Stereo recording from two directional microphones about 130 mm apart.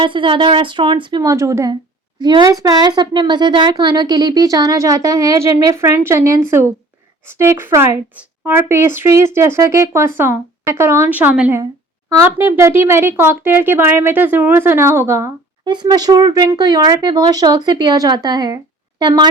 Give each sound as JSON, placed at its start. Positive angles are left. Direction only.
{"t": 0.0, "sound": "a woman's voice", "side_deg": -40}
{"t": 15.6, "sound": "speech", "side_deg": -35}